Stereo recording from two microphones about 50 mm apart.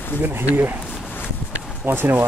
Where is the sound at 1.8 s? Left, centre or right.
Right.